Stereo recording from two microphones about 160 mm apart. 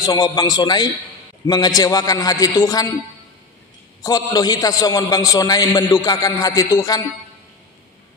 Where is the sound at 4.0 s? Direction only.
25° left (ahead or behind).